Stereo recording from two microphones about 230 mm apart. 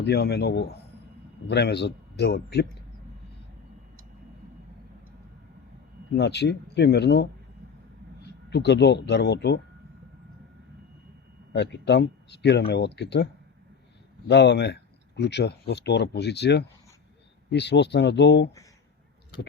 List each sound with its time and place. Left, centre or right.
0.0 s speech: left
6.1 s speech: left
8.4 s speech: left
11.5 s speech: left
14.3 s speech: left